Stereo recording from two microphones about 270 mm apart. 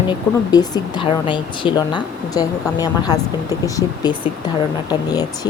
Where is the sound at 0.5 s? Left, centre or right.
Centre.